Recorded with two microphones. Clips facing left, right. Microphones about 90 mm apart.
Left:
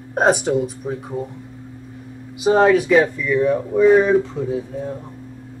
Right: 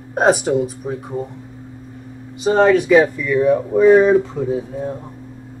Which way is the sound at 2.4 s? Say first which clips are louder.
Right 1 dB; 5° left (ahead or behind).